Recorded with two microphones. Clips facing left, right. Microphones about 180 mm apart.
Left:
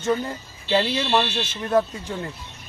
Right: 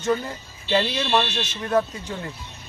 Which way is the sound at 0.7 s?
5° left (ahead or behind).